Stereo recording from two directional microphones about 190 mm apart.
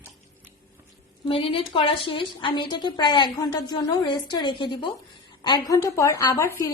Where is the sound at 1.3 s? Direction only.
30° left (ahead or behind).